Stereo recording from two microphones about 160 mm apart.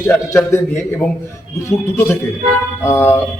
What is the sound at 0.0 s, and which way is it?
Speech, 15° left (ahead or behind).